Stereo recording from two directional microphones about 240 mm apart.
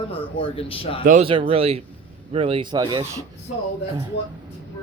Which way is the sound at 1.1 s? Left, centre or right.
Right.